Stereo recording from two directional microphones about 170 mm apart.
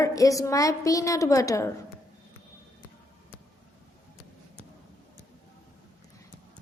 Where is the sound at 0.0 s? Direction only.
20° left (ahead or behind).